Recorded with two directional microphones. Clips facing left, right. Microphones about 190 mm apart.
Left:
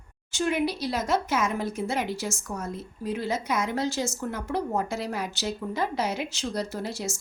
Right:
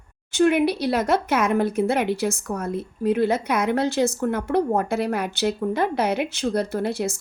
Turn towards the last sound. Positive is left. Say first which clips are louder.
# right 8 dB
turn(degrees=-60)  # may be behind; listen again after turning